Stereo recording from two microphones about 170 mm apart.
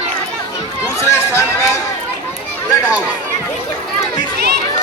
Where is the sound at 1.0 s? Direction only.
15° left (ahead or behind).